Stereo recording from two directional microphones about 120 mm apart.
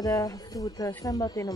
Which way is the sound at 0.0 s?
30° left (ahead or behind).